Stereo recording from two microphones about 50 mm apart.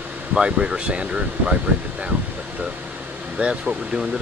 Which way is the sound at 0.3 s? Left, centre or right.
Centre.